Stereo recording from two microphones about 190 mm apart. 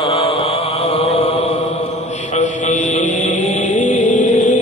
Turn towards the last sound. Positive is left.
turn(degrees=40)  # may be behind; listen again after turning